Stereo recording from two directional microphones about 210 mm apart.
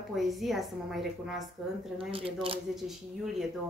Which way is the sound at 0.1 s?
Centre (ahead or behind).